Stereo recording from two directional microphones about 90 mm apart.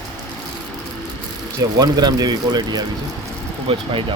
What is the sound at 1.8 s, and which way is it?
Speech, 45° right (ahead or behind).